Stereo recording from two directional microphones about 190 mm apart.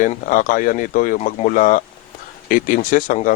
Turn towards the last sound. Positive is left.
turn(degrees=45)  # may be behind; listen again after turning